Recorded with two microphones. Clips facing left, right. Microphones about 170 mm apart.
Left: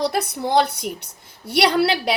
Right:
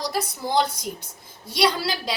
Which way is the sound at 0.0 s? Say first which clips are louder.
Left 5 dB; 65° left (ahead or behind).